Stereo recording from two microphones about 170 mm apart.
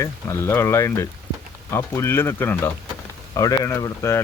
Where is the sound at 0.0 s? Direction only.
15° left (ahead or behind).